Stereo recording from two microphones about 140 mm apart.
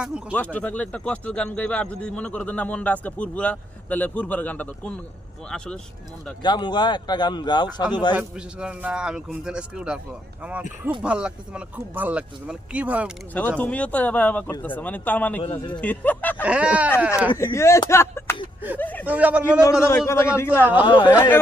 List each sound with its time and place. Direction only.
0.0 s a man's voice: 5° right (ahead or behind)
0.3 s speech: 10° left (ahead or behind)
6.4 s speech: 30° left (ahead or behind)
8.1 s a man's voice: 10° right (ahead or behind)
13.3 s speech: 10° left (ahead or behind)
15.4 s speech: 35° left (ahead or behind)
15.8 s speech: 10° left (ahead or behind)
16.4 s a man's voice: 10° right (ahead or behind)
17.3 s speech: 20° left (ahead or behind)
19.0 s a man's voice: 10° right (ahead or behind)
20.1 s speech: 20° left (ahead or behind)
20.8 s speech: 30° left (ahead or behind)